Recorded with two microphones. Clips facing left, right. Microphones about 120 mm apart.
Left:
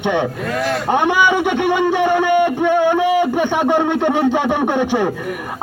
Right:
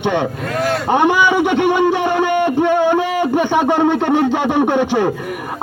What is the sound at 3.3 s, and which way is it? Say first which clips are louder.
Speech: right 1 dB; 5° right (ahead or behind).